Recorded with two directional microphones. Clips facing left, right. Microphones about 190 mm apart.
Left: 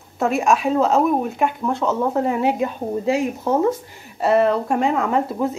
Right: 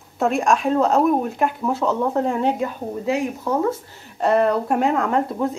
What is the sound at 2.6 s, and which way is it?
Speech, 25° left (ahead or behind).